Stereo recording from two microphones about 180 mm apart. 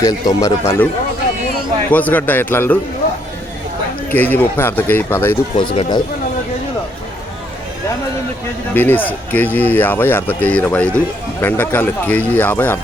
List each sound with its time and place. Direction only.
0.0 s speech: 20° left (ahead or behind)
1.9 s speech: 10° left (ahead or behind)
4.1 s speech: 10° left (ahead or behind)
5.5 s speech: 25° left (ahead or behind)
8.7 s speech: 10° left (ahead or behind)